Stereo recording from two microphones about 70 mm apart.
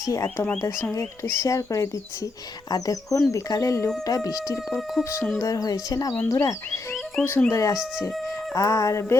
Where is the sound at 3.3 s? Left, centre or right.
Left.